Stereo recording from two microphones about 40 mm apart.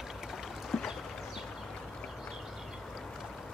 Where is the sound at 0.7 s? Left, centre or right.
Centre.